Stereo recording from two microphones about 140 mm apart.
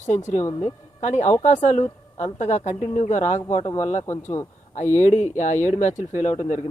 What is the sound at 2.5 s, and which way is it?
Speech, 55° left (ahead or behind).